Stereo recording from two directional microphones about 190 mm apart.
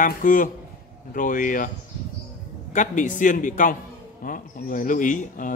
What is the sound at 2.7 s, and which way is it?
Speech, 40° left (ahead or behind).